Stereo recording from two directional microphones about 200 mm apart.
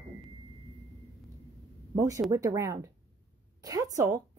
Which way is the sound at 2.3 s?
15° right (ahead or behind).